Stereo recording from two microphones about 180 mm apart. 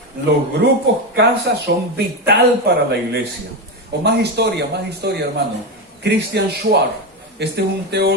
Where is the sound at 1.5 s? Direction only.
65° right (ahead or behind).